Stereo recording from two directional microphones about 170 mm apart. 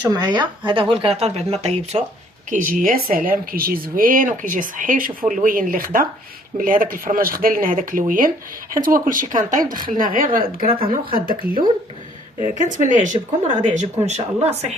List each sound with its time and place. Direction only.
0.1 s a woman's voice: 25° right (ahead or behind); by 2.0 s 40° right (ahead or behind)
2.5 s a woman's voice: 50° right (ahead or behind)